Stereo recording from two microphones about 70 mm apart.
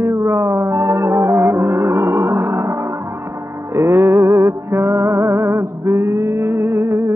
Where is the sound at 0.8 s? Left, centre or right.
Right.